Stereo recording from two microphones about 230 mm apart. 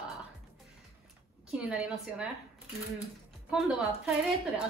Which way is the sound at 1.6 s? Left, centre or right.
Centre.